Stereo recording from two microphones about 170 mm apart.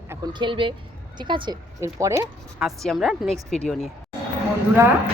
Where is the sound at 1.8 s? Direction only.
15° right (ahead or behind).